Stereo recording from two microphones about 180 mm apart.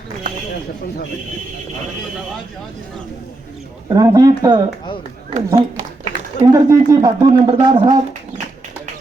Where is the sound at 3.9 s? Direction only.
20° right (ahead or behind).